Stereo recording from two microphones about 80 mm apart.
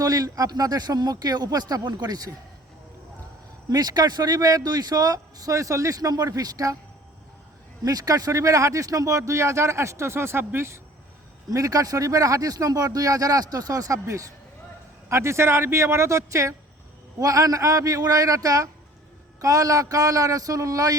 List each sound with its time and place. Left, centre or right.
0.0 s speech: right
3.7 s speech: right
7.9 s speech: right
11.5 s speech: right